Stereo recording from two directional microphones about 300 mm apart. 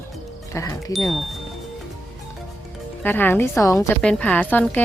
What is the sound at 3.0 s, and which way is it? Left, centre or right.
Speech, centre.